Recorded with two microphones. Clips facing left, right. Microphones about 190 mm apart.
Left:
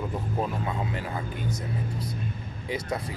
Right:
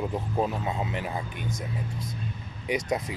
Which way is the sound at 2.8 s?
20° right (ahead or behind).